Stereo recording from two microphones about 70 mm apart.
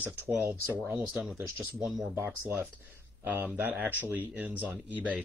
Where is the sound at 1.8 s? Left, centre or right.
Centre.